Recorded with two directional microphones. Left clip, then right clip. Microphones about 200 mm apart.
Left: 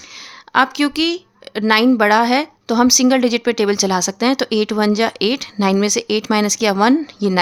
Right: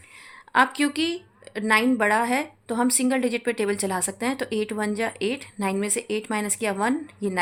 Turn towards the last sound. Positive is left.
turn(degrees=45)  # may be behind; listen again after turning